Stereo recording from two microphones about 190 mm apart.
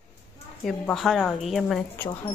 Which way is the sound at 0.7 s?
Centre (ahead or behind).